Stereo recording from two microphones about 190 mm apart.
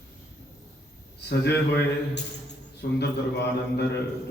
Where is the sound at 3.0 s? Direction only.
60° left (ahead or behind).